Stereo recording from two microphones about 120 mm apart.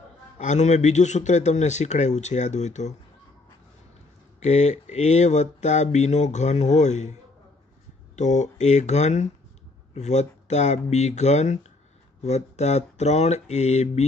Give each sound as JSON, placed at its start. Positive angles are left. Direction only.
{"t": 0.4, "sound": "speech", "side_deg": 80}
{"t": 4.4, "sound": "speech", "side_deg": 75}
{"t": 8.2, "sound": "speech", "side_deg": 80}